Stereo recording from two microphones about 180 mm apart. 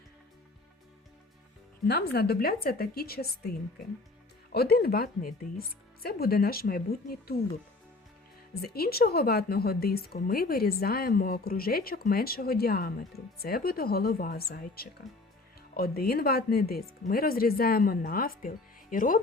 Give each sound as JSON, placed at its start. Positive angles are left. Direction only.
{"t": 1.9, "sound": "a woman's voice", "side_deg": 60}
{"t": 4.5, "sound": "a woman's voice", "side_deg": 60}
{"t": 8.6, "sound": "a woman's voice", "side_deg": 60}
{"t": 15.1, "sound": "speech", "side_deg": 0}
{"t": 15.7, "sound": "a woman's voice", "side_deg": 60}